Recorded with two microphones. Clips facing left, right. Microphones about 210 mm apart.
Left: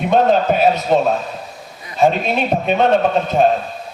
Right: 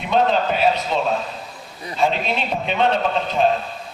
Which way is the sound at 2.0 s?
50° left (ahead or behind).